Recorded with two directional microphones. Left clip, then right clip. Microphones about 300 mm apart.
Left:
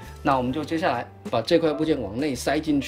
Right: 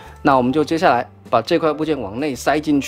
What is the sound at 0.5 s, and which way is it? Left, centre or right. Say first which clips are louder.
Speech: right 9 dB; centre.